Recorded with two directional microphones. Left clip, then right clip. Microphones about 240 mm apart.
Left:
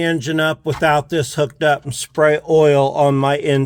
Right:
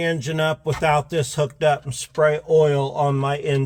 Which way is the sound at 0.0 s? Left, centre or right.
Left.